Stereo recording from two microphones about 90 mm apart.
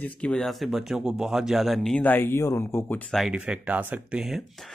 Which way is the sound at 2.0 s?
20° left (ahead or behind).